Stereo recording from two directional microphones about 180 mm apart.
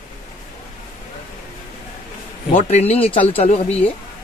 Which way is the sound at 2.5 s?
35° left (ahead or behind).